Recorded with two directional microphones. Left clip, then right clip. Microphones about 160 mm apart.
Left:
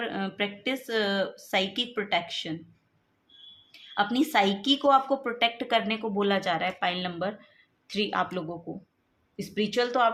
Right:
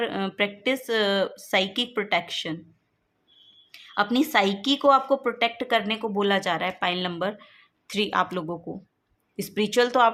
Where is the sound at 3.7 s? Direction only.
30° right (ahead or behind).